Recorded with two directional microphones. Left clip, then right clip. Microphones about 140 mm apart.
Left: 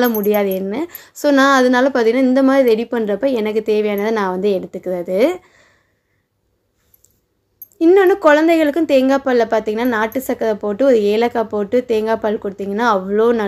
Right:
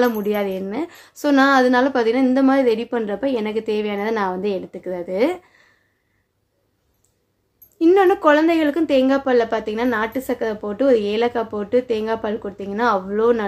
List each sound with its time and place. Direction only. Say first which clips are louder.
0.2 s a woman's voice: left 6 dB; 35° left (ahead or behind)
7.8 s a woman's voice: left 3 dB; 25° left (ahead or behind)